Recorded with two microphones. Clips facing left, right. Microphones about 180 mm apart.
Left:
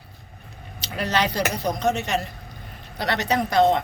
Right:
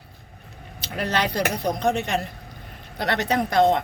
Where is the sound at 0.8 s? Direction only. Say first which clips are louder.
Left 1 dB; 55° right (ahead or behind).